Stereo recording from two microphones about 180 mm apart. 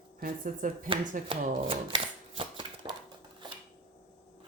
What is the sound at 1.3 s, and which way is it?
Shuffling cards, 30° right (ahead or behind).